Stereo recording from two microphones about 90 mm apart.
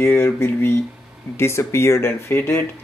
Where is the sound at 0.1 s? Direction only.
25° left (ahead or behind).